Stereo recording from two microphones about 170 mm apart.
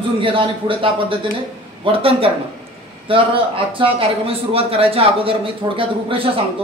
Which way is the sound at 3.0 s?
30° right (ahead or behind).